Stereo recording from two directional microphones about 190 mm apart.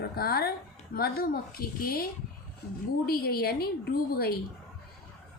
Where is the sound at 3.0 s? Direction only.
55° left (ahead or behind).